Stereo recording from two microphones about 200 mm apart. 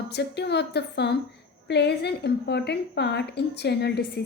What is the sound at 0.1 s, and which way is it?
A woman's voice, 55° left (ahead or behind).